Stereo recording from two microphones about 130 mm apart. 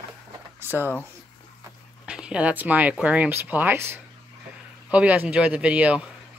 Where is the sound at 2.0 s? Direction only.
5° right (ahead or behind).